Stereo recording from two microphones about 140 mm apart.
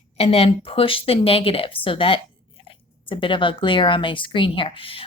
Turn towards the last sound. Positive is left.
turn(degrees=40)  # may be behind; listen again after turning